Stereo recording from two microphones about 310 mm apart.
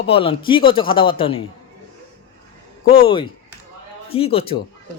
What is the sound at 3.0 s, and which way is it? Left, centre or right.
Speech, centre.